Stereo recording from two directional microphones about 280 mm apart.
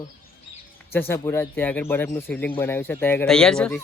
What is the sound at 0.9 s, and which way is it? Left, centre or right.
Speech, centre.